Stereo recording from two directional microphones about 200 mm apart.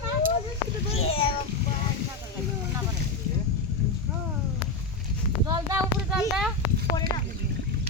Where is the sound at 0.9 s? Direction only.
30° left (ahead or behind).